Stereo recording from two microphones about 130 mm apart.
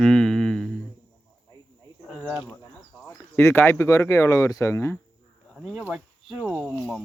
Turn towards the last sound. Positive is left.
turn(degrees=0)  # may be behind; listen again after turning